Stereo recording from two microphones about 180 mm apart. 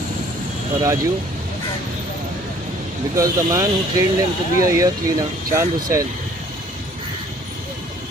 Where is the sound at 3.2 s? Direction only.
15° right (ahead or behind).